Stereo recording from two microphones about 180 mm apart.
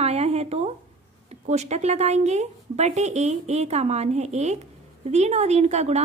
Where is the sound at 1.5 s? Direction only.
40° right (ahead or behind).